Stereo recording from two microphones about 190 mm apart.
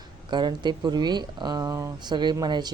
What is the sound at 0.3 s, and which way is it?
Speech, 25° right (ahead or behind).